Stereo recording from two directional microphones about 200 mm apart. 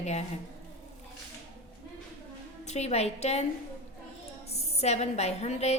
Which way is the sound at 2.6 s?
35° left (ahead or behind).